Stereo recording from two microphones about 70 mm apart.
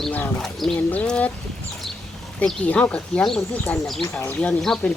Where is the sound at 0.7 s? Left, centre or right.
Centre.